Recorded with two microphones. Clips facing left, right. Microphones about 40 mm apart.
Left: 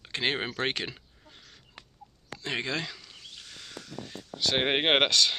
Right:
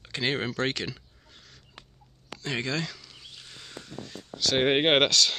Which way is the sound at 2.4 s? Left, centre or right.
Left.